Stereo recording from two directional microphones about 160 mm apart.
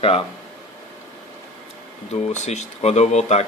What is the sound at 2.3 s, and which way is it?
Speech, 45° left (ahead or behind).